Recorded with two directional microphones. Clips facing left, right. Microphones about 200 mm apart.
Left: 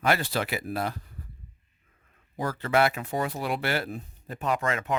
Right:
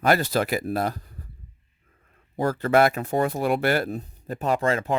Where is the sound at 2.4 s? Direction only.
45° right (ahead or behind).